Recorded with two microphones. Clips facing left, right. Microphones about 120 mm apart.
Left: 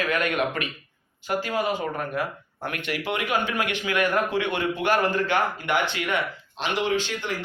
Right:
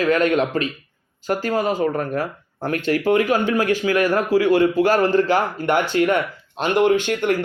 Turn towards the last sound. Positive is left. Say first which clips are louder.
# right 9 dB
turn(degrees=-55)  # may be behind; listen again after turning